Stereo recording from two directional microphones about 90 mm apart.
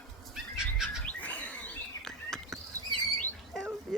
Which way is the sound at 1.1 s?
15° left (ahead or behind).